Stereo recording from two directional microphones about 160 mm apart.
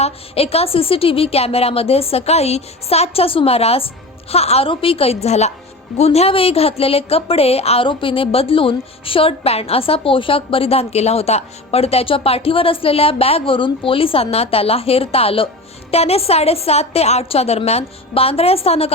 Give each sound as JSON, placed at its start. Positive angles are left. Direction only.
{"t": 0.0, "sound": "a woman's voice", "side_deg": 40}